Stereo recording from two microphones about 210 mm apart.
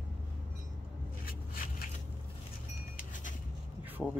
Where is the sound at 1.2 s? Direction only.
45° left (ahead or behind).